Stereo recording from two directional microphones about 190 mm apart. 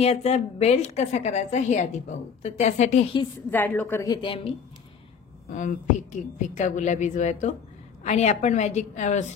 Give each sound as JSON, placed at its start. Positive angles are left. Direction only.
{"t": 0.0, "sound": "a woman's voice", "side_deg": 35}
{"t": 3.4, "sound": "a woman's voice", "side_deg": 10}
{"t": 5.5, "sound": "a woman's voice", "side_deg": 40}